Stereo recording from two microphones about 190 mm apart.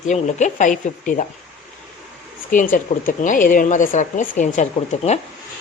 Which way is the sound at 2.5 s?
45° left (ahead or behind).